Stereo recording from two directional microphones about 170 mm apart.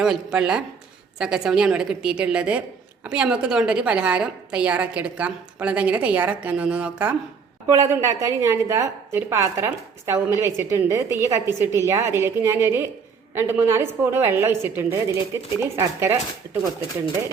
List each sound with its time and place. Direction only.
0.0 s a woman's voice: 5° right (ahead or behind)